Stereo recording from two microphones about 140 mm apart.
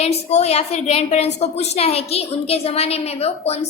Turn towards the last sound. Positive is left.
turn(degrees=50)  # may be behind; listen again after turning